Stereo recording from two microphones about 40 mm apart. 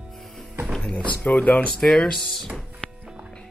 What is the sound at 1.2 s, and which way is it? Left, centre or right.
Speech, left.